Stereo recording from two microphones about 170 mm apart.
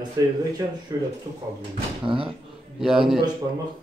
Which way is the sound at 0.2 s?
20° right (ahead or behind).